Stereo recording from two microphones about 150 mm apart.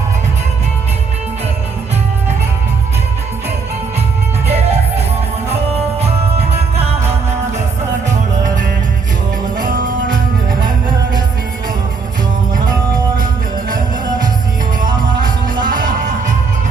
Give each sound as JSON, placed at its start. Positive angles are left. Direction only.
{"t": 4.4, "sound": "music", "side_deg": -45}
{"t": 8.0, "sound": "music", "side_deg": -55}
{"t": 15.2, "sound": "music", "side_deg": -65}